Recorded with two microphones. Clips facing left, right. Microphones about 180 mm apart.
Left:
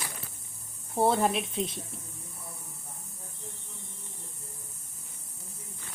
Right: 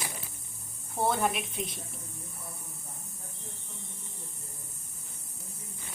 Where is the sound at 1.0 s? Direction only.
30° left (ahead or behind).